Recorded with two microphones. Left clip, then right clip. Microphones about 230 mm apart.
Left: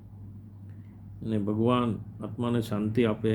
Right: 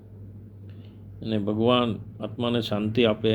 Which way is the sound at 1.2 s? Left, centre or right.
Centre.